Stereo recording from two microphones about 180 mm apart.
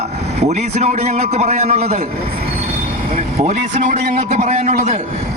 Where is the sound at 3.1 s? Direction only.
40° right (ahead or behind).